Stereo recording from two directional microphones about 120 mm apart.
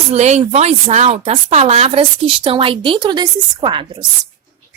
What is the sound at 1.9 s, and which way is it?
A woman's voice, 45° right (ahead or behind).